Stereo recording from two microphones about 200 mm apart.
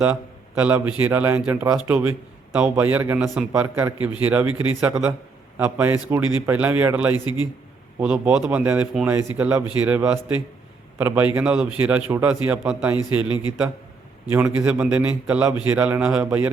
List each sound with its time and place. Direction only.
0.6 s a man's voice: 10° right (ahead or behind)
13.2 s a man's voice: 20° left (ahead or behind)
14.3 s a man's voice: 5° right (ahead or behind)